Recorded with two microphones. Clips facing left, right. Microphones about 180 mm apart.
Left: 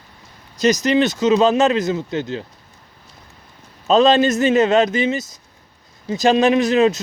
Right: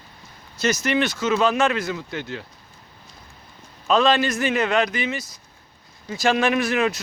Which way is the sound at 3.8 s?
20° left (ahead or behind).